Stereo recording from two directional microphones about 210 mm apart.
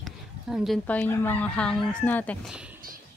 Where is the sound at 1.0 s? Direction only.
10° left (ahead or behind).